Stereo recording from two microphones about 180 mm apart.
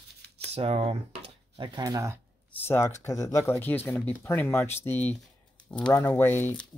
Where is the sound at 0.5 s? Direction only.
35° right (ahead or behind).